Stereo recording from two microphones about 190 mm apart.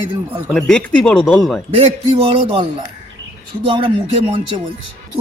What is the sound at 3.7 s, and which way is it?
Speech, 25° right (ahead or behind).